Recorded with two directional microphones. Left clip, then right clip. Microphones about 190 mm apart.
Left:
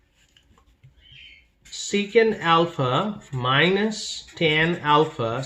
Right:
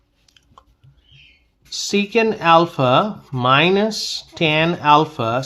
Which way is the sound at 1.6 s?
45° right (ahead or behind).